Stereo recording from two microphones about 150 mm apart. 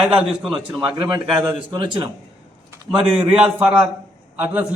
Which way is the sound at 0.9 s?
30° right (ahead or behind).